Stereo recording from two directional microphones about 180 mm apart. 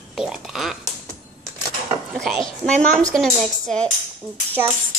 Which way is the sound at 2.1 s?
Centre (ahead or behind).